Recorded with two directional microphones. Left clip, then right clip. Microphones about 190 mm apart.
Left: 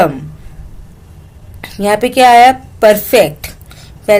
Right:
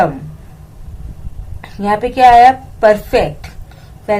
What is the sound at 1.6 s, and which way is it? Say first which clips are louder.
A woman's voice: left 3 dB; 45° left (ahead or behind).